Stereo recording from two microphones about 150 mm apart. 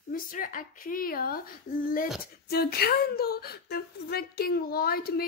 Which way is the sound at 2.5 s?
90° left.